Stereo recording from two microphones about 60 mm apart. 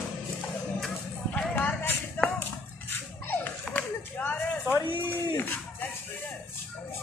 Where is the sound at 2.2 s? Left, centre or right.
Left.